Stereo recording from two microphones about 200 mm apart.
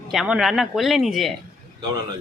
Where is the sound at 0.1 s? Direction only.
Centre (ahead or behind).